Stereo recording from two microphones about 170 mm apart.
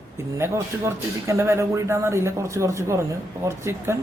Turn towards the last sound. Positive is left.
turn(degrees=-15)  # may be behind; listen again after turning